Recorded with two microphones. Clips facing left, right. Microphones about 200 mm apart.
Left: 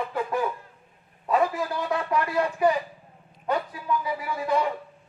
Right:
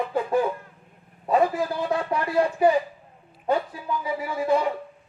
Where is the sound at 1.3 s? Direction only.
30° right (ahead or behind).